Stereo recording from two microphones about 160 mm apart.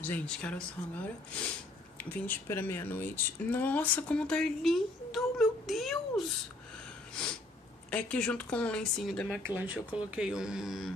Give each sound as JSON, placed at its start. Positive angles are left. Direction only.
{"t": 0.0, "sound": "speech", "side_deg": 10}
{"t": 2.2, "sound": "speech", "side_deg": 15}
{"t": 7.9, "sound": "speech", "side_deg": 5}
{"t": 9.6, "sound": "speech", "side_deg": -5}